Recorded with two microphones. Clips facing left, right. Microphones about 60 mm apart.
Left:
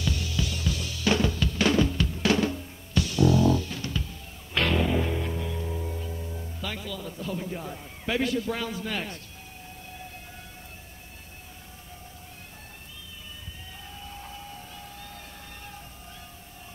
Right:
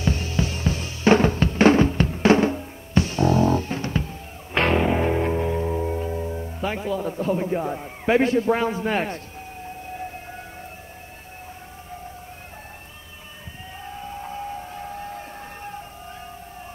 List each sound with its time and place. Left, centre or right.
0.0 s drum: right
9.9 s siren: right
13.8 s a sound: right